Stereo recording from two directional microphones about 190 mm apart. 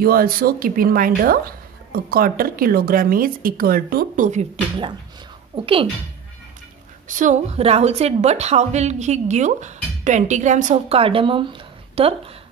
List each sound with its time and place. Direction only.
0.0 s a woman's voice: 50° right (ahead or behind)
5.5 s a woman's voice: 30° right (ahead or behind)
7.1 s a woman's voice: 40° right (ahead or behind)